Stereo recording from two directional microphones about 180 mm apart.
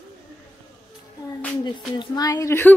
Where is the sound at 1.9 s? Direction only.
25° left (ahead or behind).